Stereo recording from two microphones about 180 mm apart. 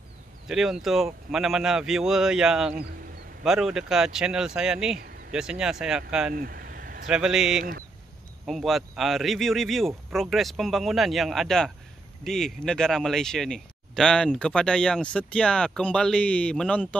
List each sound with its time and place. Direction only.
0.5 s speech: centre (ahead or behind)
6.3 s vehicle: 55° right (ahead or behind)
7.1 s speech: 5° right (ahead or behind)